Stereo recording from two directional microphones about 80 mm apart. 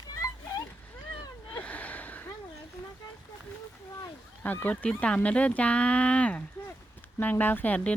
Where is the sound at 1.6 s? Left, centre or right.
Centre.